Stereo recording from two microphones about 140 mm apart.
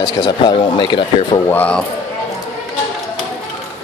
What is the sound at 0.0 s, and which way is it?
Speech, 30° left (ahead or behind).